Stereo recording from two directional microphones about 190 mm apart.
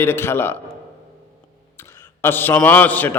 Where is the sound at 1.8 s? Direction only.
15° left (ahead or behind).